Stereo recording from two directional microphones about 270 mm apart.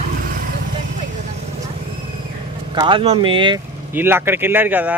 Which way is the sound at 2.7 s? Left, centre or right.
Centre.